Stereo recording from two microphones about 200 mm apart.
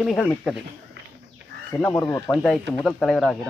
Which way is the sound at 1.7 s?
5° left (ahead or behind).